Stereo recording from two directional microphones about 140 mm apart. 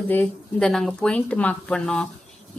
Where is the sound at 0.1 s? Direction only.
10° left (ahead or behind).